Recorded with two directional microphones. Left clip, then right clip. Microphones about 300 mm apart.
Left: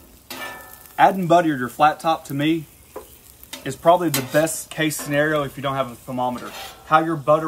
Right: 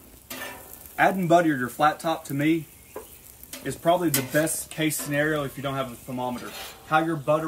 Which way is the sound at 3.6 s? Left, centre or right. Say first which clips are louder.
Left 6 dB; centre.